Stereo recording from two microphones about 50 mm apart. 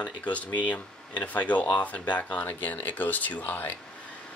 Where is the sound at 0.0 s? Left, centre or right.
Left.